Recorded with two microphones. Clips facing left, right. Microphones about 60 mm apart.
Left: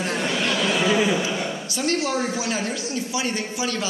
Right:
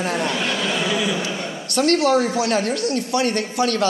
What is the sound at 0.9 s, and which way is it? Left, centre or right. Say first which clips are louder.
Speech: left 2 dB; left.